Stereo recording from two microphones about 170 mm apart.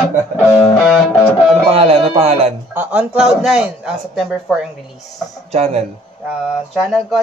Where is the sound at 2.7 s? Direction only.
10° right (ahead or behind).